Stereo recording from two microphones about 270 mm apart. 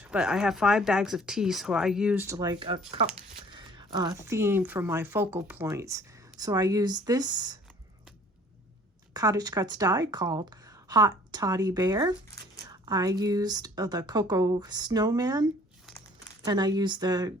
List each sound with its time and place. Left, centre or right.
0.1 s speech: centre
3.2 s a sound: centre
4.3 s speech: centre
9.1 s speech: centre
16.5 s speech: centre